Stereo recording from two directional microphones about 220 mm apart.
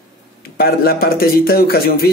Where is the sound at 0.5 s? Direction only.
45° left (ahead or behind).